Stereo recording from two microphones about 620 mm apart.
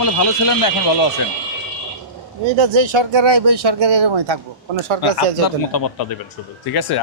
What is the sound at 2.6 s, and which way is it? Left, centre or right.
Speech, right.